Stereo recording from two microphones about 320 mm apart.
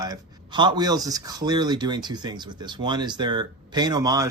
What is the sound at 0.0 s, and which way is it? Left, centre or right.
Speech, centre.